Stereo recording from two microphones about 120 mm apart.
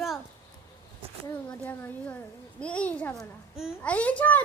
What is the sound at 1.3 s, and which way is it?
A woman's voice, 15° left (ahead or behind).